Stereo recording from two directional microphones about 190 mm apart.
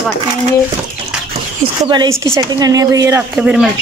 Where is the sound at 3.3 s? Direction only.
5° right (ahead or behind).